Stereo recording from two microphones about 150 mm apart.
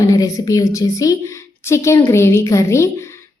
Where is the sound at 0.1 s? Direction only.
25° left (ahead or behind).